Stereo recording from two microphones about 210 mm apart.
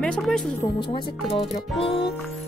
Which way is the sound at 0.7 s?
20° left (ahead or behind).